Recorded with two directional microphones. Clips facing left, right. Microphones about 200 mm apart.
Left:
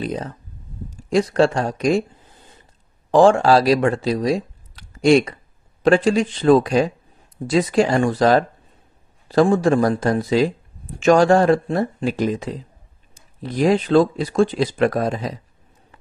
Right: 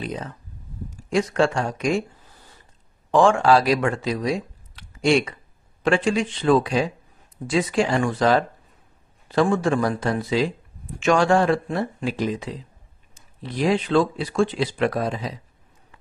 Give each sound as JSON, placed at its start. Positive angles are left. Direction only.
{"t": 0.0, "sound": "speech", "side_deg": 35}
{"t": 2.2, "sound": "a sound", "side_deg": 20}
{"t": 3.1, "sound": "speech", "side_deg": 35}